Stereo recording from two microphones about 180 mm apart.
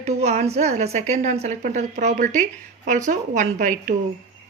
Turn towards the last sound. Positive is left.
turn(degrees=-45)  # may be behind; listen again after turning